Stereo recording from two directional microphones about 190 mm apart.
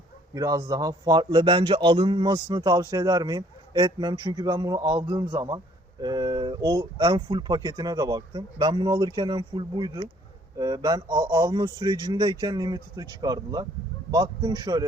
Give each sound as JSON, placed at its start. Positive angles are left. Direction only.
{"t": 0.3, "sound": "speech", "side_deg": -20}